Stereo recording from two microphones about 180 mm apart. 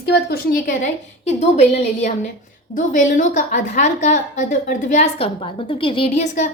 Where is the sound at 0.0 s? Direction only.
60° left (ahead or behind).